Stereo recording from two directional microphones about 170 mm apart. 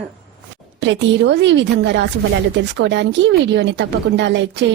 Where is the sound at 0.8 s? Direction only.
90° right.